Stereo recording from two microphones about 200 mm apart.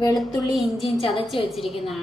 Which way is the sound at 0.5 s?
Centre (ahead or behind).